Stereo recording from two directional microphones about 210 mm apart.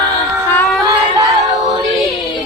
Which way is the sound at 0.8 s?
15° right (ahead or behind).